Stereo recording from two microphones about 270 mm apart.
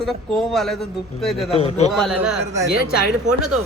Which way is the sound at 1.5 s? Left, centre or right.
Left.